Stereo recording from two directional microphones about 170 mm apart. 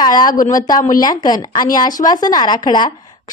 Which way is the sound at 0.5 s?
20° left (ahead or behind).